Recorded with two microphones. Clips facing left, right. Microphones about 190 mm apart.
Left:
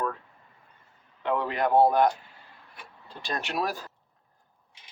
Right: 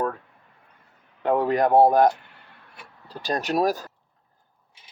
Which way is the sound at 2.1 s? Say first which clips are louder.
Even; 65° right (ahead or behind).